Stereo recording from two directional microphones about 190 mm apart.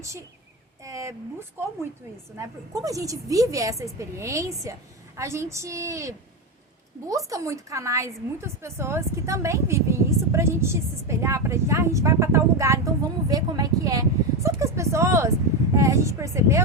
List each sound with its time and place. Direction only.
0.9 s a woman's voice: 15° right (ahead or behind)